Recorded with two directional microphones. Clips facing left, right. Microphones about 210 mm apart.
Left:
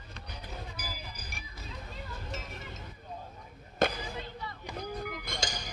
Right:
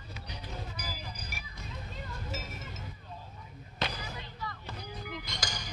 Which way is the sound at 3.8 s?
50° left (ahead or behind).